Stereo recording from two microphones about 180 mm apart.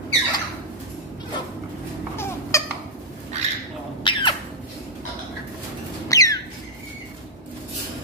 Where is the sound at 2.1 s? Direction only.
15° left (ahead or behind).